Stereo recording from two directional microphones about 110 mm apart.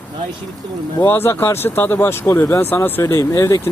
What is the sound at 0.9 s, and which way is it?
Speech, 20° left (ahead or behind).